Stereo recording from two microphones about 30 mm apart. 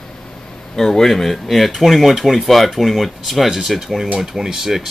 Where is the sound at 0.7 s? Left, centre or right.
Centre.